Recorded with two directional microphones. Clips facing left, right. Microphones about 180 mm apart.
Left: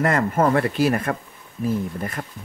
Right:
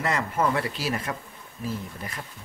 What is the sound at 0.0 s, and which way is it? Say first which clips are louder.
Speech: left 6 dB; 50° left (ahead or behind).